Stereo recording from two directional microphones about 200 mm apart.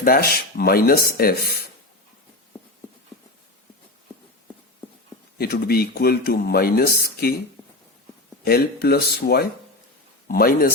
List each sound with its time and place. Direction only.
0.0 s speech: 45° left (ahead or behind)
5.4 s speech: 50° left (ahead or behind)
8.4 s speech: 50° left (ahead or behind)